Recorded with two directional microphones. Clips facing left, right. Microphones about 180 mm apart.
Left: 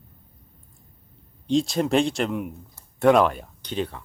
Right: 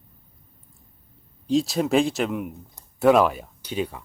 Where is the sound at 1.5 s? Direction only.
Centre (ahead or behind).